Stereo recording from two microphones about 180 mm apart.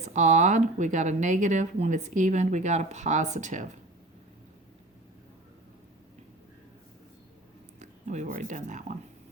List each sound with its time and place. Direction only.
0.0 s speech: 40° right (ahead or behind)
7.8 s speech: 40° right (ahead or behind)